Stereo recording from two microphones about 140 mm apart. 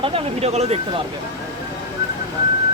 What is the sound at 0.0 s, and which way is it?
Speech, 45° right (ahead or behind).